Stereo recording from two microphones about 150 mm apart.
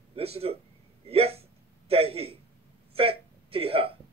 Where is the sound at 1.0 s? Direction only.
40° right (ahead or behind).